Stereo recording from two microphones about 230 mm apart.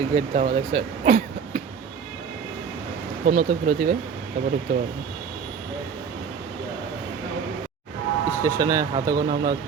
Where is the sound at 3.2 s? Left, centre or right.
Right.